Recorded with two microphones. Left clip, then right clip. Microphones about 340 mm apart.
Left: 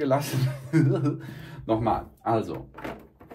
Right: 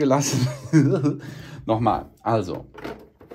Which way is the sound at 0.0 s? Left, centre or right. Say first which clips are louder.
Right 5 dB; centre.